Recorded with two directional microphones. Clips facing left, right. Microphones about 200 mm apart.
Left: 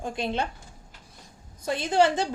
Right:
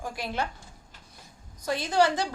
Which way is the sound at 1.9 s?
25° left (ahead or behind).